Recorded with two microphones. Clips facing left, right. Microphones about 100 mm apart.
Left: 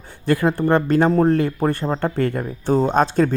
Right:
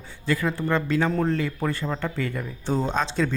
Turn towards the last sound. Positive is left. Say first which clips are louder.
# left 8 dB
turn(degrees=55)  # may be behind; listen again after turning